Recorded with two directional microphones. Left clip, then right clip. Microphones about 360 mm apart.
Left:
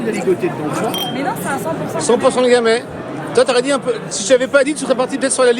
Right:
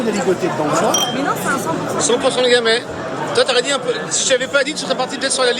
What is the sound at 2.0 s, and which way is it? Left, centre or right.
Speech, centre.